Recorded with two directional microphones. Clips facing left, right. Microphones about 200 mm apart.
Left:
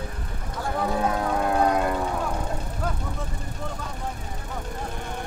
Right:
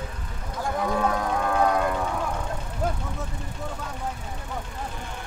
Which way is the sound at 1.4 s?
35° left (ahead or behind).